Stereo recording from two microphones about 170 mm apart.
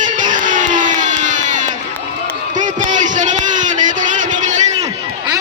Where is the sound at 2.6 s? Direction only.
45° right (ahead or behind).